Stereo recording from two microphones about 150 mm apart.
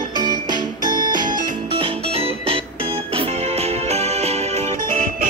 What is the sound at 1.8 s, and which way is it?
Music, 40° right (ahead or behind).